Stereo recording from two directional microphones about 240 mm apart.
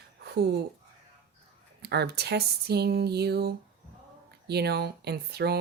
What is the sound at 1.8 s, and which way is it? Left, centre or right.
Speech, right.